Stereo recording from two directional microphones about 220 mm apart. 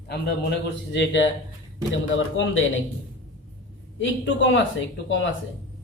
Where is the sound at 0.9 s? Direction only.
55° left (ahead or behind).